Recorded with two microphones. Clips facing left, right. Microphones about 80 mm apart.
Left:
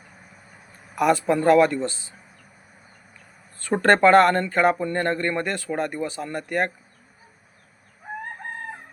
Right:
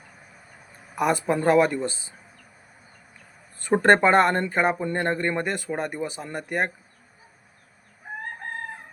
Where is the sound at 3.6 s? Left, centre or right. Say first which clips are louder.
Left 1 dB; centre.